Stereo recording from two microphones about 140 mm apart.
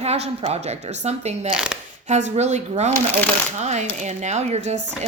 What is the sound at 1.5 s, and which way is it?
Speech, 5° right (ahead or behind).